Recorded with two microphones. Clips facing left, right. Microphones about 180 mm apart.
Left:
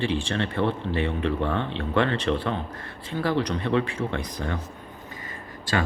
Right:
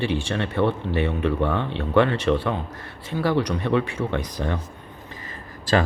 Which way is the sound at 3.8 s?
20° right (ahead or behind).